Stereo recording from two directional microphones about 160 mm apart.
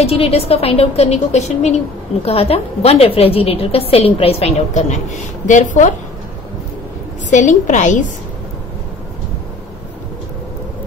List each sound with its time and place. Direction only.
0.0 s a woman's voice: 35° left (ahead or behind)
7.2 s a woman's voice: 50° left (ahead or behind)